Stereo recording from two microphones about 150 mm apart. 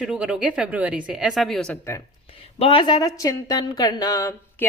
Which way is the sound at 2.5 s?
40° left (ahead or behind).